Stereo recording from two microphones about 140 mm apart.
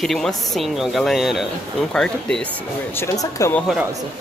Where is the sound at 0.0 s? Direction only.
Centre (ahead or behind).